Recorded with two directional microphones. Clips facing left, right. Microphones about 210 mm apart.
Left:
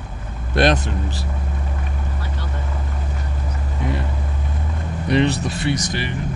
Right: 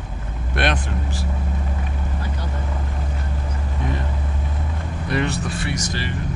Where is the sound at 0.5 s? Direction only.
35° left (ahead or behind).